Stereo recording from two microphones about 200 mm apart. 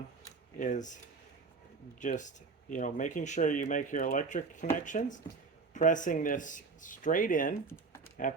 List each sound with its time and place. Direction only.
0.6 s speech: 40° left (ahead or behind)
2.0 s speech: 40° left (ahead or behind)